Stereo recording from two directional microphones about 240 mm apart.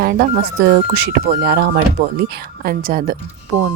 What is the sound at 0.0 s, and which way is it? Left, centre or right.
Speech, right.